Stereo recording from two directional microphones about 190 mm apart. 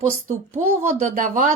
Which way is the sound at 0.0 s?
40° right (ahead or behind).